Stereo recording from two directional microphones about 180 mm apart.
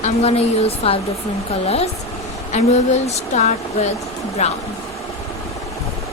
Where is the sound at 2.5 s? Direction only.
40° left (ahead or behind).